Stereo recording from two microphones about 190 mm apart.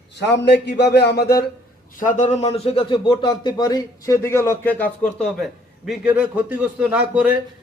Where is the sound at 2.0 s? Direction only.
40° left (ahead or behind).